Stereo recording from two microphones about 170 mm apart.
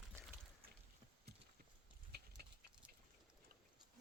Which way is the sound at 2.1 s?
75° right (ahead or behind).